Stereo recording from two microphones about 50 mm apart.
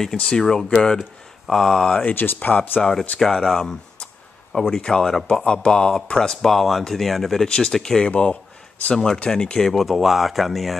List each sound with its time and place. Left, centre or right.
0.0 s speech: centre
2.1 s speech: left
2.8 s speech: centre
7.4 s speech: centre
8.1 s a sound: left
8.9 s speech: centre
9.7 s speech: centre